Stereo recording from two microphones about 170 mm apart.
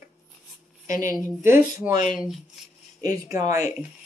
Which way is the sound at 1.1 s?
15° right (ahead or behind).